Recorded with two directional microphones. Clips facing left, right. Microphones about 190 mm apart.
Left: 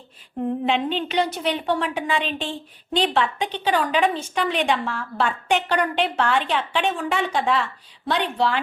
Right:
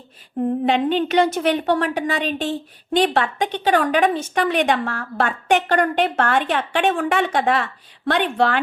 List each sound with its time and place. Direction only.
0.6 s a woman's voice: 45° right (ahead or behind); by 7.6 s 65° right (ahead or behind)
7.6 s a woman's voice: 55° right (ahead or behind)